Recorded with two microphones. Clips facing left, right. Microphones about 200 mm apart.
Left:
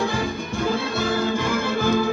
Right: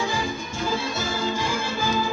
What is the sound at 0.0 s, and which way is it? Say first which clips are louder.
Music: left 3 dB; 60° left (ahead or behind).